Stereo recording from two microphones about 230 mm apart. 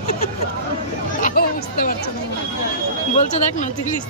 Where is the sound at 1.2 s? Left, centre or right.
Left.